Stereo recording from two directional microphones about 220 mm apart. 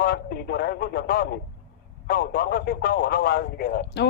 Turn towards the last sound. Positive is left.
turn(degrees=45)  # may be behind; listen again after turning